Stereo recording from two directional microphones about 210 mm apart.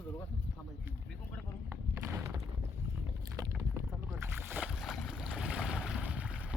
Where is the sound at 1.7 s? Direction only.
15° right (ahead or behind).